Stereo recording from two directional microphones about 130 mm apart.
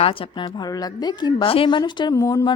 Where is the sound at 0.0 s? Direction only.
45° left (ahead or behind).